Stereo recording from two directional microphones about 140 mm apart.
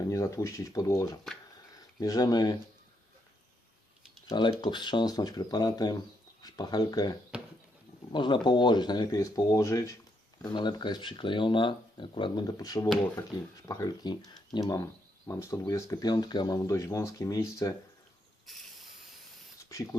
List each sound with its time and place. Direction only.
0.1 s speech: 20° left (ahead or behind)
4.3 s speech: 35° left (ahead or behind)
19.6 s speech: 20° left (ahead or behind)